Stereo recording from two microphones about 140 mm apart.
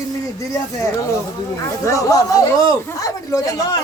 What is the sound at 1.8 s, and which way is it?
Speech, 20° left (ahead or behind).